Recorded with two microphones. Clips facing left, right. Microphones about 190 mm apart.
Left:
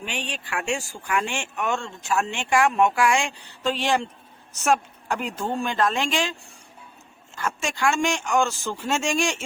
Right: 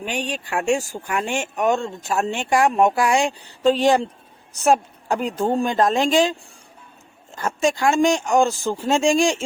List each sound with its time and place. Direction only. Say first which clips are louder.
0.0 s speech: right 6 dB; 45° right (ahead or behind)
7.3 s speech: right 7 dB; 40° right (ahead or behind)